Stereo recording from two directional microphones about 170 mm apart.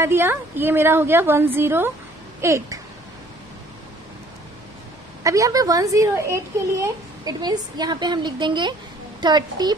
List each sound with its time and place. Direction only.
0.0 s a woman's voice: 15° right (ahead or behind)
5.2 s speech: 20° right (ahead or behind)